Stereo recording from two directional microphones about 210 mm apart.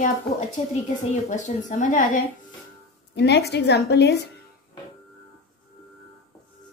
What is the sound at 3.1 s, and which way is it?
A woman's voice, 50° left (ahead or behind).